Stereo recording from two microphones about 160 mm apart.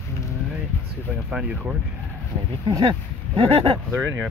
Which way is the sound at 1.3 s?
10° right (ahead or behind).